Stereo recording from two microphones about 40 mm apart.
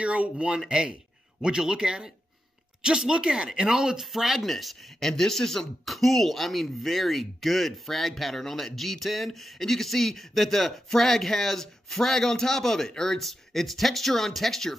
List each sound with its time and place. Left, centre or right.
0.0 s speech: right
0.7 s speech: right; by 14.8 s centre